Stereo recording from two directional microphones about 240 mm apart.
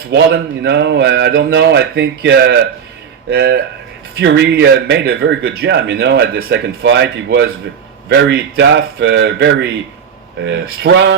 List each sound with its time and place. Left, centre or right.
0.1 s speech: right